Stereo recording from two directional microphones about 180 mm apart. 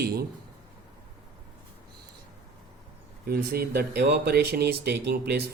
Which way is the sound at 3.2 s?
60° right (ahead or behind).